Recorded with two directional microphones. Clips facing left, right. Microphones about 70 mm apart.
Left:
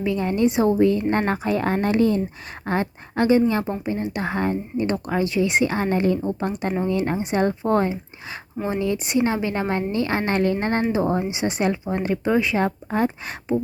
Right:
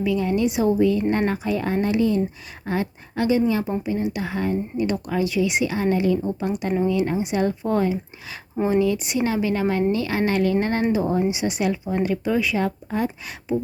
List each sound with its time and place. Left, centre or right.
0.0 s speech: left